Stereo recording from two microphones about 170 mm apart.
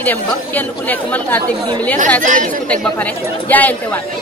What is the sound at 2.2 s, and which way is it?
Speech, 50° right (ahead or behind).